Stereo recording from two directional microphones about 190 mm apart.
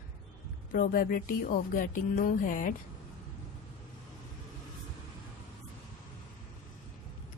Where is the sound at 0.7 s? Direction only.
50° left (ahead or behind).